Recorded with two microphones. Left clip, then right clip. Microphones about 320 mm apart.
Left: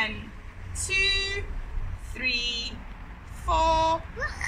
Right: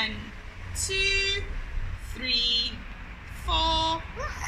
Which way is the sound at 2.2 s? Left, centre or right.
Left.